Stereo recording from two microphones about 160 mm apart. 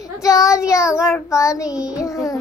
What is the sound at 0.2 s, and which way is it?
Child singing, 20° left (ahead or behind).